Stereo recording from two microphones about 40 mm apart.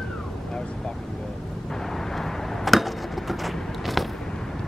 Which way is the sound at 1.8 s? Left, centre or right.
Centre.